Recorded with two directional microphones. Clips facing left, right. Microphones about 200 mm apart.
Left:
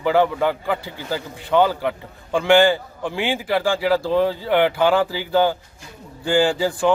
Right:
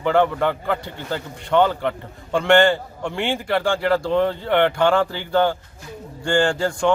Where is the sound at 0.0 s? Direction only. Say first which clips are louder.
Even; 5° left (ahead or behind).